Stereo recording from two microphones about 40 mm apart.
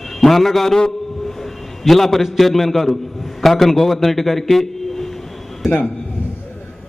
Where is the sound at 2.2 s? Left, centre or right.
Centre.